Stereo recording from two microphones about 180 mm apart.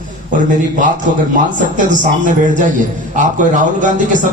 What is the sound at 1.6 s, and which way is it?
A man's voice, 45° right (ahead or behind).